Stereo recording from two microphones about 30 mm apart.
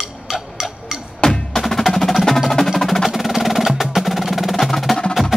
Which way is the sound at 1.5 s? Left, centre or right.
Centre.